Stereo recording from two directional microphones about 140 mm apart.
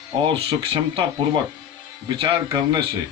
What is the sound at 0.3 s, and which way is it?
Speech, 40° right (ahead or behind).